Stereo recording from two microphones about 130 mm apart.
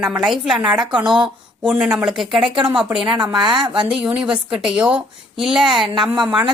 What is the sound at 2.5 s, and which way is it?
A woman's voice, 40° right (ahead or behind).